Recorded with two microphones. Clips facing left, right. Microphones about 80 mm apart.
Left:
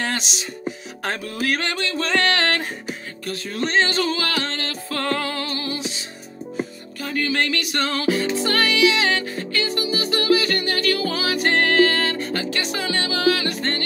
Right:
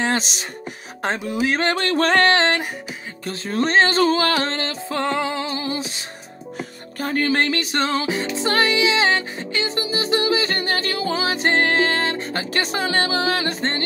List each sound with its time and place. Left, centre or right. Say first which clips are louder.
0.2 s music: right 1 dB; right
1.0 s music: right 3 dB; right
1.6 s music: right 5 dB; right
1.9 s music: right 5 dB; right
2.2 s music: right 4 dB; right
3.3 s music: right 4 dB; right; by 5.8 s centre
7.0 s music: right 3 dB; right
12.4 s music: right 2 dB; right